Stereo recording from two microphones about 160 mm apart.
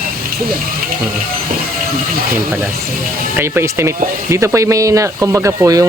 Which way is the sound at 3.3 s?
15° right (ahead or behind).